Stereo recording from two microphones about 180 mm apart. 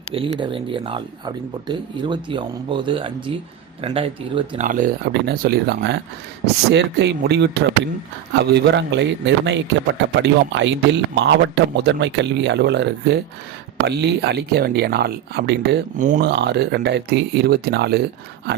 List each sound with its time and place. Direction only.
0.1 s speech: 30° right (ahead or behind)
4.6 s speech: 50° right (ahead or behind)
5.2 s speech: 60° right (ahead or behind)
16.0 s speech: 45° right (ahead or behind)
16.2 s speech: 70° right (ahead or behind)